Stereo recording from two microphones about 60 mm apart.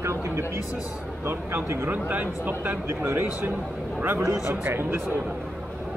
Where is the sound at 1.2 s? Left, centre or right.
Right.